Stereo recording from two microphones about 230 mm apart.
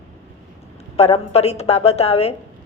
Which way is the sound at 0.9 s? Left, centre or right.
Left.